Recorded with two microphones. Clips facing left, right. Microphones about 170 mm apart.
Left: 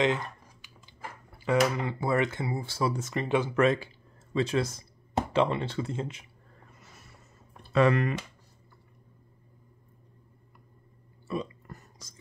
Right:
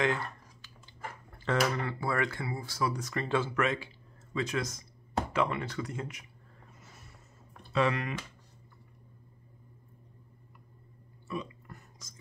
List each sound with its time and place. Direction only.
0.0 s a sound: 20° left (ahead or behind)
1.4 s speech: 15° left (ahead or behind)
3.5 s speech: 35° left (ahead or behind)
7.7 s speech: 50° left (ahead or behind)
11.2 s whispering: 35° left (ahead or behind)